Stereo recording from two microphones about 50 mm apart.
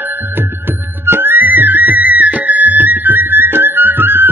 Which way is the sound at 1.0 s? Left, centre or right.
Right.